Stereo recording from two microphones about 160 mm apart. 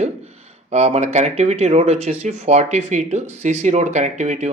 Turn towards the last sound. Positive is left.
turn(degrees=-45)  # may be behind; listen again after turning